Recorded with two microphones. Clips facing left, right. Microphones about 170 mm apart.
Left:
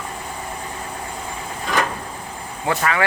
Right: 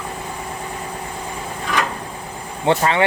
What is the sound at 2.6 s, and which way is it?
Speech, 25° right (ahead or behind).